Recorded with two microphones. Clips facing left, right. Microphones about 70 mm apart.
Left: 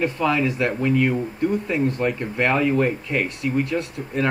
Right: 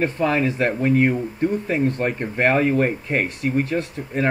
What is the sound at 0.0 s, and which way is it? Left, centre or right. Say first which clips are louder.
Speech: right 1 dB; right.